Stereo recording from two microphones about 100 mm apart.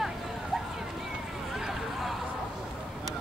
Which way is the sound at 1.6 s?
Centre (ahead or behind).